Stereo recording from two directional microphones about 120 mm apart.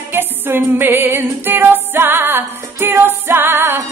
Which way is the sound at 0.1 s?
20° right (ahead or behind).